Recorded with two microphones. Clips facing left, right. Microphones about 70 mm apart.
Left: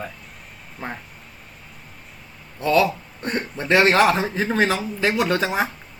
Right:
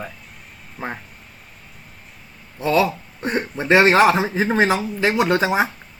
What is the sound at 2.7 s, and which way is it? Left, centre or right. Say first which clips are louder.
Speech: even; centre.